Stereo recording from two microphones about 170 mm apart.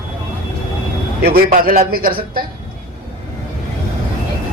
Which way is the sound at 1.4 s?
60° right (ahead or behind).